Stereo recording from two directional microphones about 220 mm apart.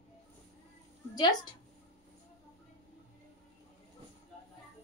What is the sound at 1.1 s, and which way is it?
Speech, 20° left (ahead or behind).